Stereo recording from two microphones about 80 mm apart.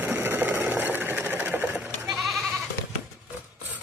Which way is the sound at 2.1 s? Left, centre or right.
Centre.